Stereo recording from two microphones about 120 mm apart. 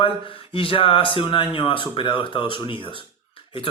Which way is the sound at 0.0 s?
45° left (ahead or behind).